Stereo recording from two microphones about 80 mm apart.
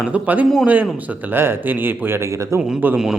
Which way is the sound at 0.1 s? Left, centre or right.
Centre.